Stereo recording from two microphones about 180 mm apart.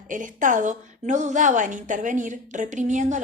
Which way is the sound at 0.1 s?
45° right (ahead or behind).